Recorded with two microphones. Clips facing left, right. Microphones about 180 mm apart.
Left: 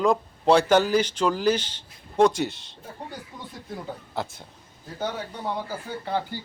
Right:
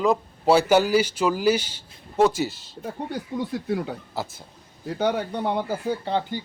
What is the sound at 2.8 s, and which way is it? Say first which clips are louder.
Speech: right 8 dB; 75° right (ahead or behind).